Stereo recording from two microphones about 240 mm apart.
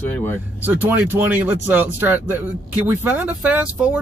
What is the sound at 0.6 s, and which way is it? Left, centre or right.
Speech, centre.